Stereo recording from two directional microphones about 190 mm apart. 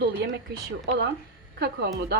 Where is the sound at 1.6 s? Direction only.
60° right (ahead or behind).